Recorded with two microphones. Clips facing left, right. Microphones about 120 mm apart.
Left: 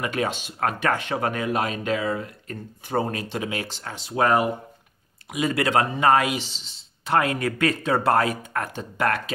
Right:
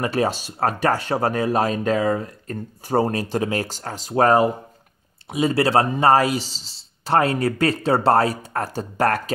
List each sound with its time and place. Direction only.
0.0 s speech: 35° right (ahead or behind)